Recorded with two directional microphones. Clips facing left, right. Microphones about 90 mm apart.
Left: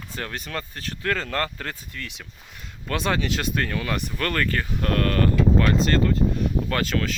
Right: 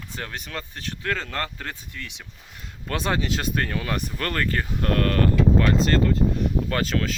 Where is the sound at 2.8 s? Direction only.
30° right (ahead or behind).